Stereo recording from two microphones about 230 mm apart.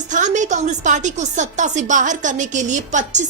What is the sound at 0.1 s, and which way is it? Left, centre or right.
A woman's voice, right.